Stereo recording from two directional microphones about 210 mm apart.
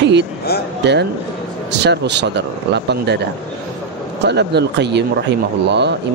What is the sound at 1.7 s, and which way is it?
Speech, 55° right (ahead or behind).